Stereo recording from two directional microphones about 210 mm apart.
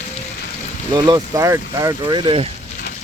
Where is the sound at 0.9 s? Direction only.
20° right (ahead or behind).